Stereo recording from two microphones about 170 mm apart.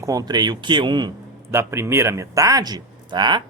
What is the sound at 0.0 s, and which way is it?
A man's voice, 20° right (ahead or behind).